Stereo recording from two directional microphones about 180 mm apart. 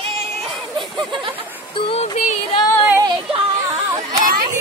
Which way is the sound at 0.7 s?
25° right (ahead or behind).